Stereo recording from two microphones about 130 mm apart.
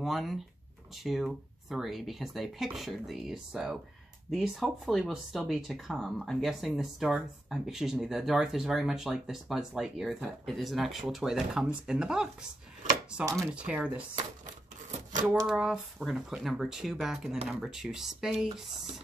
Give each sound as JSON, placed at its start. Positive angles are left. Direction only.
{"t": 0.0, "sound": "speech", "side_deg": 0}
{"t": 13.6, "sound": "speech", "side_deg": -10}
{"t": 14.4, "sound": "a sound", "side_deg": -70}
{"t": 15.4, "sound": "speech", "side_deg": -5}